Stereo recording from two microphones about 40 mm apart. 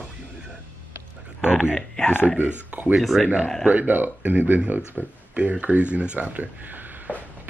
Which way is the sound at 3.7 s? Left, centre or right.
Right.